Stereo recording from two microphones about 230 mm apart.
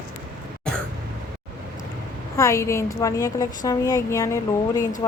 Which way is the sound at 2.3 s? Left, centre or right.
Centre.